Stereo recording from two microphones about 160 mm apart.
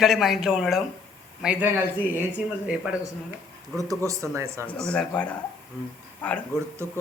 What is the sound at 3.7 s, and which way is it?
Mantra, 20° right (ahead or behind).